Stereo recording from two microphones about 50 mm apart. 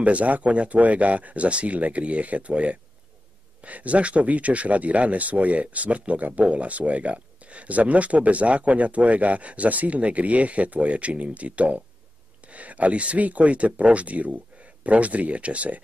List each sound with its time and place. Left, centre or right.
0.0 s speech: right